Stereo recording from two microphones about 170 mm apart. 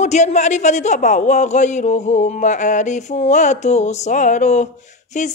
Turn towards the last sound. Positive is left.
turn(degrees=45)  # may be behind; listen again after turning